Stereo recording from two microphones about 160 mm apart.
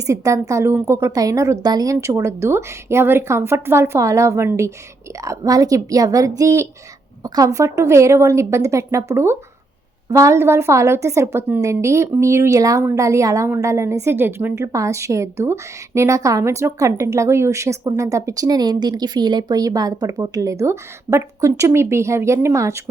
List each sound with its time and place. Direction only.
0.1 s a woman's voice: 20° right (ahead or behind)